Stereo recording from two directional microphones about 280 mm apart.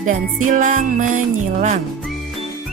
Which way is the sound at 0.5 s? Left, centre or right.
Right.